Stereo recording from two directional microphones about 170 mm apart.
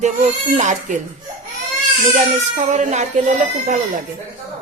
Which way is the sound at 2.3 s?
40° right (ahead or behind).